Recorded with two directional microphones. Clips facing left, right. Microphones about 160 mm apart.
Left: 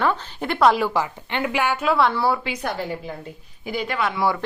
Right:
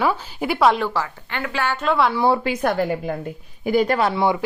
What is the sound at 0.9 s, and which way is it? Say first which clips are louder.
Speech: left 2 dB; 20° left (ahead or behind).